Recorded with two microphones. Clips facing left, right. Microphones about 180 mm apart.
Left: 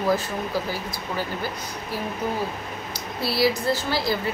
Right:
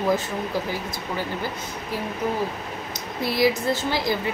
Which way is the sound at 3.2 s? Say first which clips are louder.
Right 1 dB; 15° right (ahead or behind).